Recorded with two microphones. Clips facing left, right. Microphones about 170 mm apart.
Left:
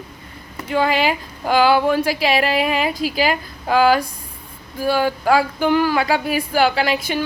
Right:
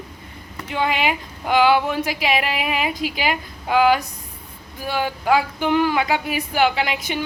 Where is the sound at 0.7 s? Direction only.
35° left (ahead or behind).